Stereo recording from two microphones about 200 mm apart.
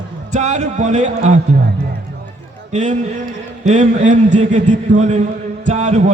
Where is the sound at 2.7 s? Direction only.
35° right (ahead or behind).